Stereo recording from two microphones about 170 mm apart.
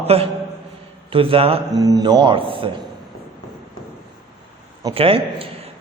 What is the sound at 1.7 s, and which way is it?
A man's voice, 20° right (ahead or behind).